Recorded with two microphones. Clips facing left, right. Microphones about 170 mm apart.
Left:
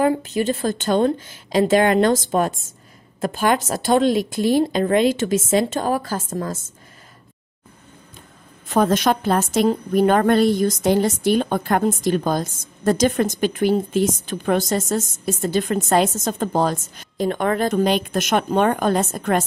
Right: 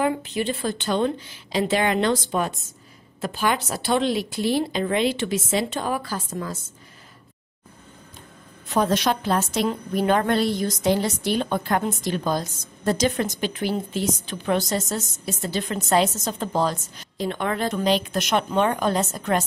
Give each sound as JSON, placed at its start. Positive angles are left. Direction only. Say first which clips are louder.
{"t": 0.0, "sound": "a woman's voice", "louder": "left 5 dB", "side_deg": 40}
{"t": 8.6, "sound": "a woman's voice", "louder": "left 4 dB", "side_deg": 50}